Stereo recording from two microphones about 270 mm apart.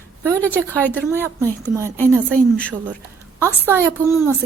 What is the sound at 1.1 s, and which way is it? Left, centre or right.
Speech, centre.